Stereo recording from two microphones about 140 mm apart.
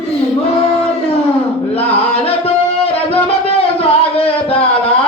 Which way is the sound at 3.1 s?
45° left (ahead or behind).